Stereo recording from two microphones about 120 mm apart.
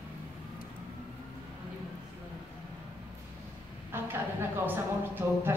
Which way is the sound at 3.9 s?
20° right (ahead or behind).